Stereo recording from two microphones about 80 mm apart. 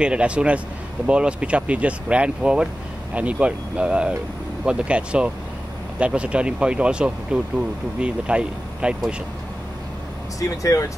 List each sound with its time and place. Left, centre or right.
0.0 s speech: centre
10.6 s speech: left